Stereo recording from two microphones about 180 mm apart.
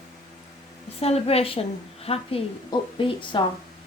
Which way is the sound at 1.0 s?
35° left (ahead or behind).